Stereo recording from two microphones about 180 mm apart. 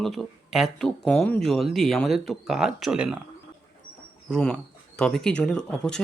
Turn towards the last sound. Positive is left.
turn(degrees=5)  # may be behind; listen again after turning